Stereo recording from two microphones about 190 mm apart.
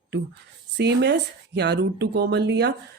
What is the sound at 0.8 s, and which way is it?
Speech, 65° right (ahead or behind).